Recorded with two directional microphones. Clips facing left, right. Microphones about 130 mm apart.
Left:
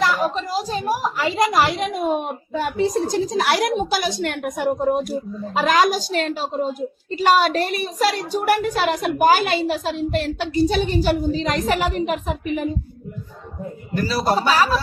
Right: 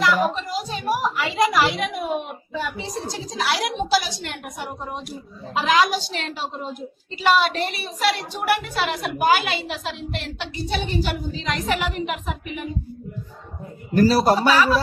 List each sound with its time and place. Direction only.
0.2 s a woman's voice: 35° left (ahead or behind)
13.9 s a man's voice: 40° right (ahead or behind)
14.5 s a woman's voice: 35° left (ahead or behind)